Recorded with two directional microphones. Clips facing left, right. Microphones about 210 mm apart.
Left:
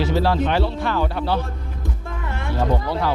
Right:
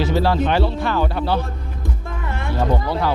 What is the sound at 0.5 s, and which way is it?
Speech, 15° right (ahead or behind).